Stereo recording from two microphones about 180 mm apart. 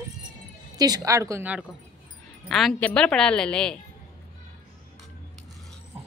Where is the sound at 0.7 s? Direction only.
20° right (ahead or behind).